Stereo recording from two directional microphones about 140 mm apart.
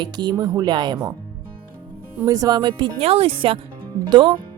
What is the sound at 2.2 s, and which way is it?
Speech, 25° right (ahead or behind).